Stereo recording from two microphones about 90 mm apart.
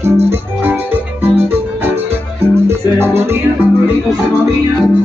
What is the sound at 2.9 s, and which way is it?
Music, 25° right (ahead or behind).